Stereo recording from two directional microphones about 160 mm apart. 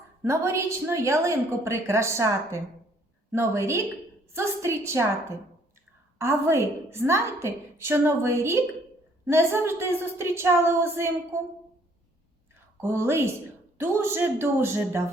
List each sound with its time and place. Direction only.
0.2 s a woman's voice: 15° right (ahead or behind)
12.7 s a woman's voice: 15° right (ahead or behind)